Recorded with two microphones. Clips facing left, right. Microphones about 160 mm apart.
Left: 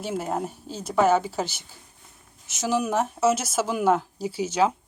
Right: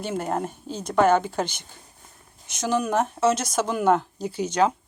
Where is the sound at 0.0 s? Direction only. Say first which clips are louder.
Right 1 dB; 5° left (ahead or behind).